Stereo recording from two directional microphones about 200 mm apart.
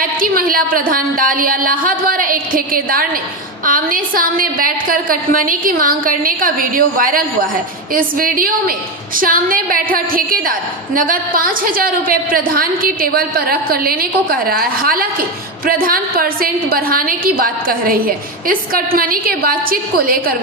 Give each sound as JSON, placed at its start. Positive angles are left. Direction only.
{"t": 0.0, "sound": "a woman's voice", "side_deg": -45}